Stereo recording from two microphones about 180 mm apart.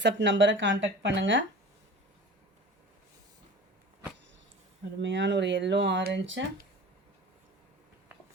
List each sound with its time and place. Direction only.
0.0 s speech: 80° right
5.0 s speech: 90° right; by 6.4 s 75° right (ahead or behind)